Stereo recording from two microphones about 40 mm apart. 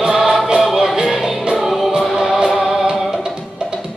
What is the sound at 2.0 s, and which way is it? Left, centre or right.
Music, centre.